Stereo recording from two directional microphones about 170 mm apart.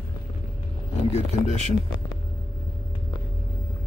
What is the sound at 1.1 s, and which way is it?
Speech, 45° left (ahead or behind).